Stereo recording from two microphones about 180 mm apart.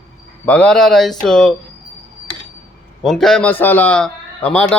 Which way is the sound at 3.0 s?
Centre (ahead or behind).